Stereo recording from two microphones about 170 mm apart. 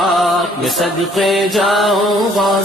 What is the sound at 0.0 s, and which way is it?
Music, centre (ahead or behind).